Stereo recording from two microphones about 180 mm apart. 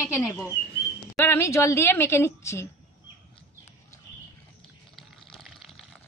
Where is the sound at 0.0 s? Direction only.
20° left (ahead or behind).